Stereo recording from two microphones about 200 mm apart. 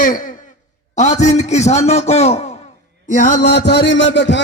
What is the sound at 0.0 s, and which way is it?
A man's voice, 45° left (ahead or behind).